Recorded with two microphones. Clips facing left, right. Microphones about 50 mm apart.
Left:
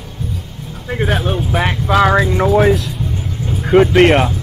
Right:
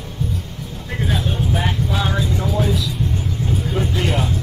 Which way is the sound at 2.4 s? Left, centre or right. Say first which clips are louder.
Left 9 dB; left.